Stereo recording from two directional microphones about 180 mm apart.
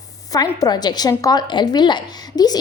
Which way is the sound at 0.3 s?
20° left (ahead or behind).